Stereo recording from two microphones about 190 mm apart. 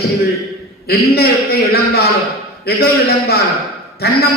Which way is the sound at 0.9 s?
55° left (ahead or behind).